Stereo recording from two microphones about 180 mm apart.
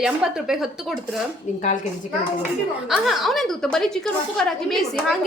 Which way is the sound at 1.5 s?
40° left (ahead or behind).